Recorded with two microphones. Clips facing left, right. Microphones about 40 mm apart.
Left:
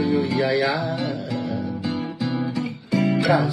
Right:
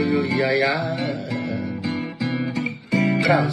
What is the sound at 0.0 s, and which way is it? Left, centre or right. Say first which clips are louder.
Music: even; right.